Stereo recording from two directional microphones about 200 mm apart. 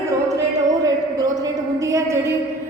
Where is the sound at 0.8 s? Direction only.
20° right (ahead or behind).